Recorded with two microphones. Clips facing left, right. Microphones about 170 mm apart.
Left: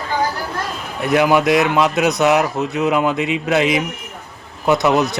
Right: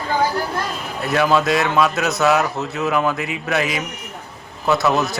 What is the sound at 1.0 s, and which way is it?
A man's voice, 15° left (ahead or behind).